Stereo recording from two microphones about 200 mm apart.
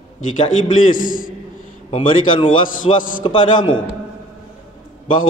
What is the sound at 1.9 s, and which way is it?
A man's voice, 25° left (ahead or behind).